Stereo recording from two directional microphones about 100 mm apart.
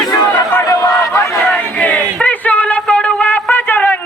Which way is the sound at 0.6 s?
35° left (ahead or behind).